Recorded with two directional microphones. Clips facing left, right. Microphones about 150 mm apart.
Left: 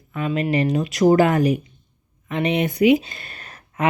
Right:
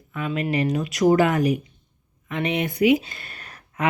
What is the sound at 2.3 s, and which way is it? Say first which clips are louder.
Speech: left 4 dB; 20° left (ahead or behind).